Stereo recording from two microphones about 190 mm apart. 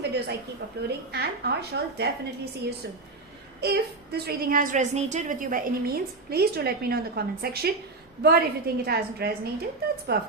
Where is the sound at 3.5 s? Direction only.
60° right (ahead or behind).